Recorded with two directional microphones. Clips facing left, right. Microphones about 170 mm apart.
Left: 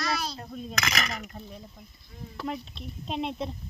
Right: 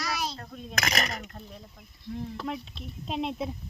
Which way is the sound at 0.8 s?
35° right (ahead or behind).